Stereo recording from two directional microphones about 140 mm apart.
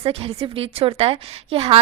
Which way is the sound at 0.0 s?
45° right (ahead or behind).